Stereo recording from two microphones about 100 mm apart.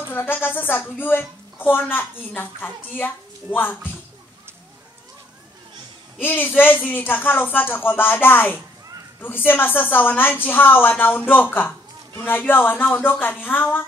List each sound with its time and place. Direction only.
0.1 s a woman's voice: 20° left (ahead or behind)
6.2 s a woman's voice: 20° left (ahead or behind)